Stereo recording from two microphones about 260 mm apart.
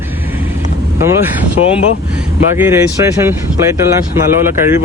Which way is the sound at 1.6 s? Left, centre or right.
Left.